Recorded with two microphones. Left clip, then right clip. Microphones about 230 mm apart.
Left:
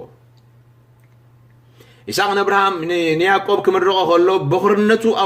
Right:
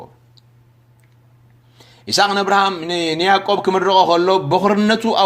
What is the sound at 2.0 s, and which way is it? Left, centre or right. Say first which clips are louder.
A man's voice: right 1 dB; right.